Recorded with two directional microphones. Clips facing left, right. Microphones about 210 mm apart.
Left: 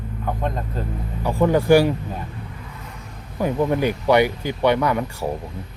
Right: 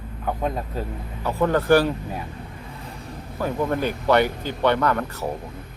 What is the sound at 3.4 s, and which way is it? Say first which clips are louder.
Speech: left 4 dB; 15° left (ahead or behind).